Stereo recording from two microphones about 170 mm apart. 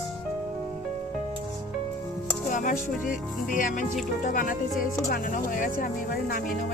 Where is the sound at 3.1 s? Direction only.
50° left (ahead or behind).